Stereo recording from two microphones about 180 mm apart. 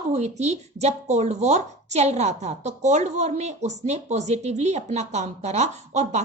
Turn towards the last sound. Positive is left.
turn(degrees=-40)  # may be behind; listen again after turning